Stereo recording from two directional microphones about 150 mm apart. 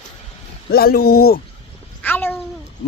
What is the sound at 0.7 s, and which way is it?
Speech, 90° left.